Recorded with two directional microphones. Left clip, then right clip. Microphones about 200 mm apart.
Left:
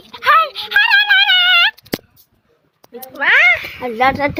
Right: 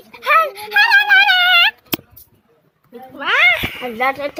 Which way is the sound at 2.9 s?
5° left (ahead or behind).